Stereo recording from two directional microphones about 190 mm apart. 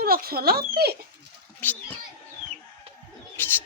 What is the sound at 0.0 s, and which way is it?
Speech, 50° right (ahead or behind).